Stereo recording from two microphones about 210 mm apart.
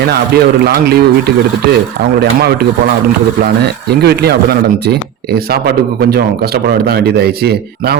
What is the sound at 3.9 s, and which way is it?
Speech, 50° right (ahead or behind).